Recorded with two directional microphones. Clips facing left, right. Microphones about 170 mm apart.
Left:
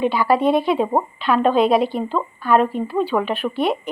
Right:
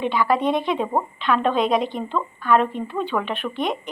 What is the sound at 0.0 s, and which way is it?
A woman's voice, 5° left (ahead or behind).